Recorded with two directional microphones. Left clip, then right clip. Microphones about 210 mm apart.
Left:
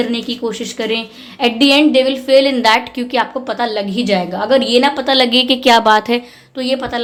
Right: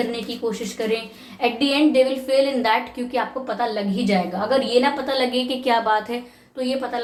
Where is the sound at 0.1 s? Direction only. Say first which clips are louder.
Left 6 dB; 45° left (ahead or behind).